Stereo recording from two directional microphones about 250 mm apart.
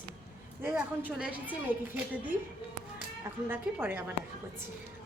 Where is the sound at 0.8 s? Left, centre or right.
Centre.